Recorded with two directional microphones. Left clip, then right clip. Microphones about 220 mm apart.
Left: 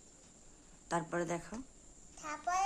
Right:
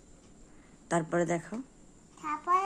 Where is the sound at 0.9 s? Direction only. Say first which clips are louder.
Right 7 dB; 10° right (ahead or behind).